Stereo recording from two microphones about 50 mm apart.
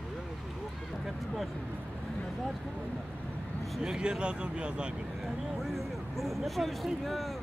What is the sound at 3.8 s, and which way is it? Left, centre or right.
Speech, centre.